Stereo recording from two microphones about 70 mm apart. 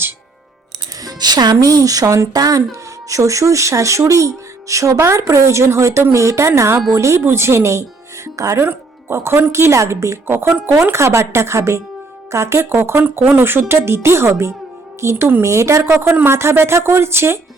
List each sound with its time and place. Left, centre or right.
1.0 s speech: right
3.1 s speech: right
8.6 s speech: right